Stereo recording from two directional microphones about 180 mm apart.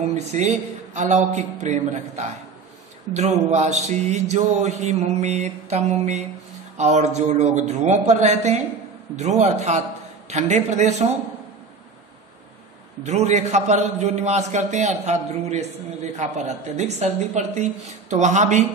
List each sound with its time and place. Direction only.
0.1 s a man's voice: 40° right (ahead or behind)
13.0 s a man's voice: 40° right (ahead or behind)